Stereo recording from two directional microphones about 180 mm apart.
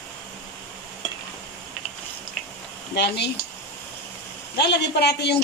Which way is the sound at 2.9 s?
70° left (ahead or behind).